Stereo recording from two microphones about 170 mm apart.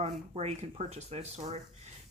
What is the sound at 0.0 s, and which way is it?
Speech, 40° right (ahead or behind).